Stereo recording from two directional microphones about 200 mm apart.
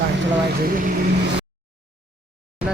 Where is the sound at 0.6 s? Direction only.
45° right (ahead or behind).